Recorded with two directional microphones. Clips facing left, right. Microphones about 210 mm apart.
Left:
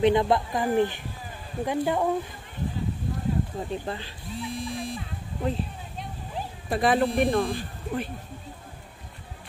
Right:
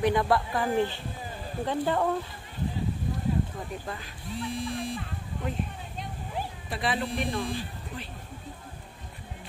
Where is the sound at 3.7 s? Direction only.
30° left (ahead or behind).